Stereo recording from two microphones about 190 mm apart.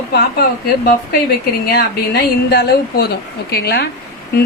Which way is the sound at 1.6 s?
55° left (ahead or behind).